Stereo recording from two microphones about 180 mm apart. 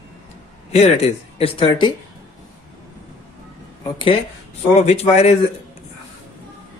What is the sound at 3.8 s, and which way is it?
Speech, 30° left (ahead or behind).